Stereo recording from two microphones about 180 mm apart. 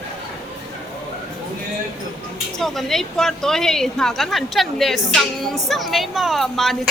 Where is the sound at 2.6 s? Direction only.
Centre (ahead or behind).